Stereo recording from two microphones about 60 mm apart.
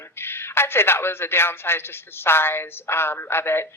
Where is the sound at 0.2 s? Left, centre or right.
Left.